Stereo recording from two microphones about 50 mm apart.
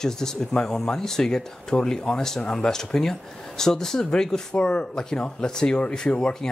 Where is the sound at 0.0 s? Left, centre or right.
Centre.